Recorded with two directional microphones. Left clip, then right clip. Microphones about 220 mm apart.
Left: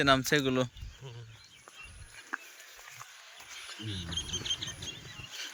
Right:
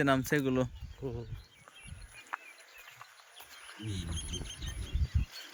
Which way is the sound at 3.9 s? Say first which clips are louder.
Left 7 dB; 60° right (ahead or behind).